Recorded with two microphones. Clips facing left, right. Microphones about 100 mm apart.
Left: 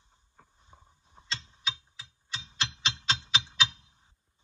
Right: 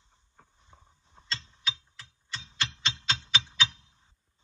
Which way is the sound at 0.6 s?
15° left (ahead or behind).